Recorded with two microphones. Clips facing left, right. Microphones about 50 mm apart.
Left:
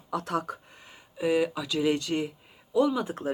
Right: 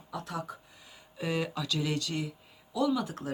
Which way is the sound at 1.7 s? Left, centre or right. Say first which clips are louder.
Left 7 dB; left.